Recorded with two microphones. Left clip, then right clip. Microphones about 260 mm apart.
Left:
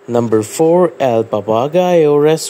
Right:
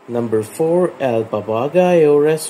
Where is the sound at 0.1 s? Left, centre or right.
Left.